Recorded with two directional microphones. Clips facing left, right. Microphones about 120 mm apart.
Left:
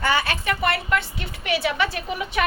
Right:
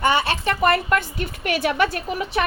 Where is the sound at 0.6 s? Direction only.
45° right (ahead or behind).